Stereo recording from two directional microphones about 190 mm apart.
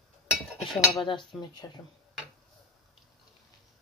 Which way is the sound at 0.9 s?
25° left (ahead or behind).